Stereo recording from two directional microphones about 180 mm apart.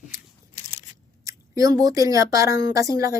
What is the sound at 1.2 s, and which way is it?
Speech, 20° right (ahead or behind).